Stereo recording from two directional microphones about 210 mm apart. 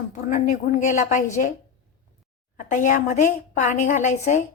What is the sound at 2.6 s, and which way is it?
Speech, 35° left (ahead or behind).